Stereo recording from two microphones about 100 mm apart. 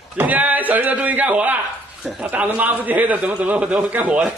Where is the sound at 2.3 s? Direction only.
15° right (ahead or behind).